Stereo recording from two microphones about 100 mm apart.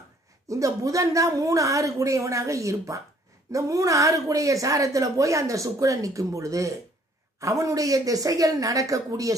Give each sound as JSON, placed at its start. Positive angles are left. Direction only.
{"t": 0.5, "sound": "a woman's voice", "side_deg": -35}